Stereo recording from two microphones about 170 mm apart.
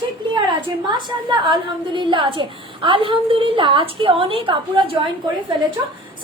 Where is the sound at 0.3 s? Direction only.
25° right (ahead or behind).